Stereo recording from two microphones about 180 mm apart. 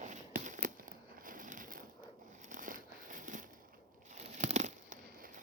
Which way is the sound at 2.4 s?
45° right (ahead or behind).